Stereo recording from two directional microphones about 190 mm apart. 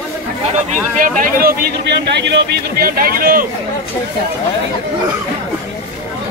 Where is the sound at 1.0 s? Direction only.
45° right (ahead or behind).